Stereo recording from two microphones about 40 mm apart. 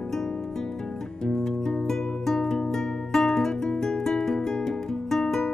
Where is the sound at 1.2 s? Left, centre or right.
Centre.